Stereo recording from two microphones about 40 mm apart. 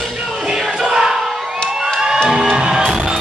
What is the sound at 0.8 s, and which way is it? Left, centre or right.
Battle cry, centre.